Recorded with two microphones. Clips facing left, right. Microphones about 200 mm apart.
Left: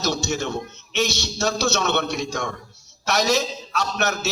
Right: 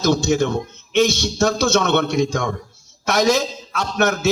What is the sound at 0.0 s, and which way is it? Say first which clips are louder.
A man's voice: right 7 dB; 50° right (ahead or behind).